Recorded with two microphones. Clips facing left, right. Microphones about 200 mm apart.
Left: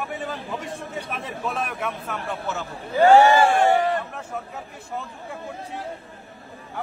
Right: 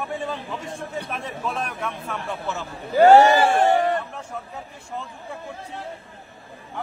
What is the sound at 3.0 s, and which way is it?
Speech, 40° right (ahead or behind).